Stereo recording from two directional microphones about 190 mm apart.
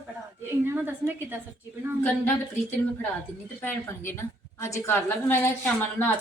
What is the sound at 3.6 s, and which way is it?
A woman's voice, 10° left (ahead or behind).